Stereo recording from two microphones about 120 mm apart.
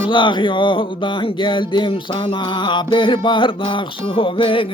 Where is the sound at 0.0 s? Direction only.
40° left (ahead or behind).